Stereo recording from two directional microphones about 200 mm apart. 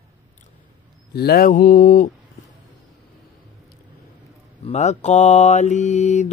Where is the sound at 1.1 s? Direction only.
50° left (ahead or behind).